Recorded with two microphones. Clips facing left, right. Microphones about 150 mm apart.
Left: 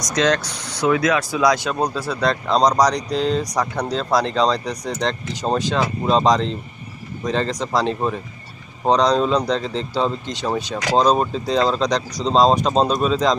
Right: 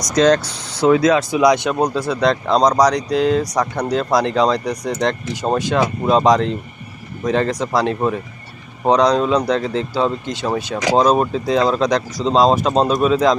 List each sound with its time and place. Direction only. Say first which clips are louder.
0.1 s a man's voice: right 5 dB; 35° right (ahead or behind); by 13.3 s 5° right (ahead or behind)